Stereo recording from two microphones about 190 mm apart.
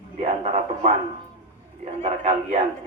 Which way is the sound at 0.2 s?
35° right (ahead or behind).